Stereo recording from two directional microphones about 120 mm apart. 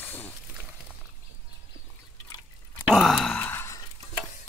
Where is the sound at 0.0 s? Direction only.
15° left (ahead or behind).